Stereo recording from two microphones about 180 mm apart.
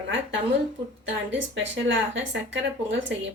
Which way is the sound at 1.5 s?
90° right.